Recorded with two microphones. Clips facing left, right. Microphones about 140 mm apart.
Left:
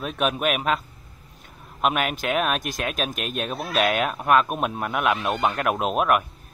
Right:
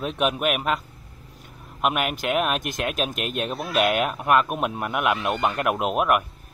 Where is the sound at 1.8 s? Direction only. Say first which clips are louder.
Left 1 dB; 10° right (ahead or behind).